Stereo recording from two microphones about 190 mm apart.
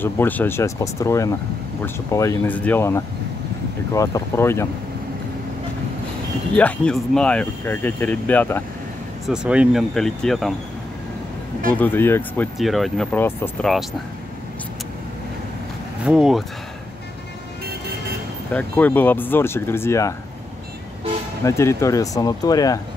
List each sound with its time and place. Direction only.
0.0 s speech: 10° left (ahead or behind)
6.5 s speech: 5° left (ahead or behind)
9.2 s speech: 5° right (ahead or behind)
11.7 s speech: 10° left (ahead or behind)
12.5 s speech: centre (ahead or behind)
16.0 s speech: 5° right (ahead or behind)
18.5 s speech: 10° left (ahead or behind)
21.5 s speech: 15° left (ahead or behind)